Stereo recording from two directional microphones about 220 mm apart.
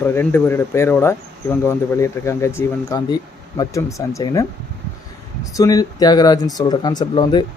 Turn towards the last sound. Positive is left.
turn(degrees=20)  # may be behind; listen again after turning